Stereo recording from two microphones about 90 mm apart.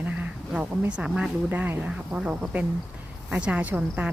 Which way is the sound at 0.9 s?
15° right (ahead or behind).